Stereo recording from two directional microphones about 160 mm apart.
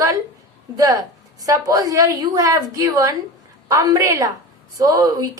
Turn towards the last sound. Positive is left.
turn(degrees=-25)  # may be behind; listen again after turning